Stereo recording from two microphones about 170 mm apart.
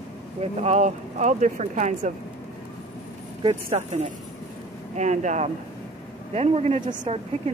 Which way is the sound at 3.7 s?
40° right (ahead or behind).